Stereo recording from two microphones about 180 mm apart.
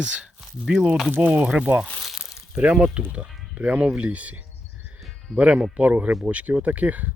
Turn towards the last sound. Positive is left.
turn(degrees=-10)  # may be behind; listen again after turning